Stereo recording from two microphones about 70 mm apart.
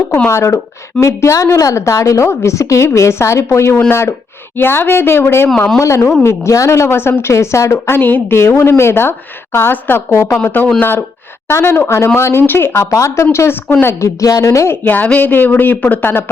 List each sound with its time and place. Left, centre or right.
0.3 s a woman's voice: left
5.8 s a woman's voice: left
8.4 s a woman's voice: left
14.2 s a woman's voice: left
14.8 s speech: left